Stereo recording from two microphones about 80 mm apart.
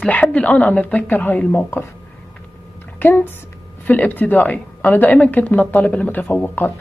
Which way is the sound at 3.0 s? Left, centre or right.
Left.